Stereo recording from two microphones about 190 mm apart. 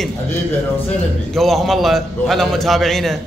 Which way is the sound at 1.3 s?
Centre (ahead or behind).